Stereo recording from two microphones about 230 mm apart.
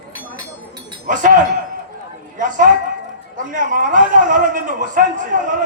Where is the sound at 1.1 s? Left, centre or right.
Right.